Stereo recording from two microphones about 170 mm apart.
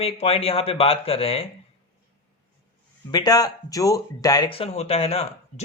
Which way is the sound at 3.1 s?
20° left (ahead or behind).